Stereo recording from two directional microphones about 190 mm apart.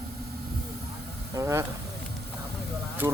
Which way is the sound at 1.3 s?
15° right (ahead or behind).